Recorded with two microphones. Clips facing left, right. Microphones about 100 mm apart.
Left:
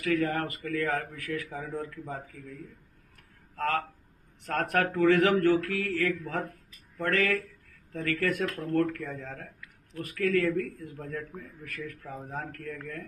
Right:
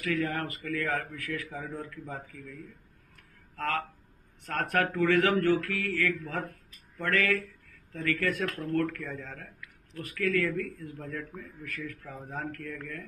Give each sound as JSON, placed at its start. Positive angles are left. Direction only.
{"t": 0.0, "sound": "a man's voice", "side_deg": 35}
{"t": 3.5, "sound": "a man's voice", "side_deg": 35}